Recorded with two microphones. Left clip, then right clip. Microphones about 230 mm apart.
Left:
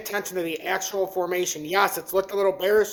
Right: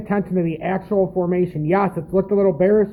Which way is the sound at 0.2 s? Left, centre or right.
Centre.